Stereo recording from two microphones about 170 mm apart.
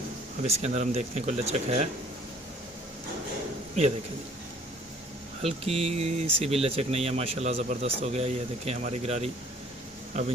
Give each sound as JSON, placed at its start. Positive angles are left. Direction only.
{"t": 0.4, "sound": "speech", "side_deg": -40}
{"t": 5.4, "sound": "speech", "side_deg": -35}